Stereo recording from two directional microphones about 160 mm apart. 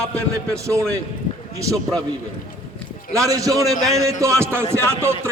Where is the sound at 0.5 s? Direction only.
20° right (ahead or behind).